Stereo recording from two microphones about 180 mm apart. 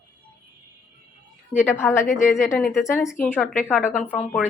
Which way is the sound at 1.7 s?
15° left (ahead or behind).